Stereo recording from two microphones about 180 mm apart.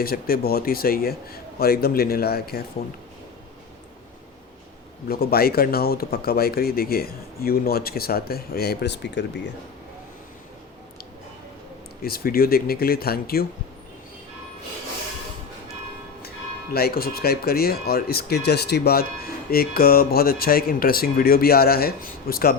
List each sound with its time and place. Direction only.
0.0 s speech: 55° left (ahead or behind)
5.0 s speech: 60° left (ahead or behind)
12.0 s speech: 55° left (ahead or behind)
16.7 s speech: 55° left (ahead or behind)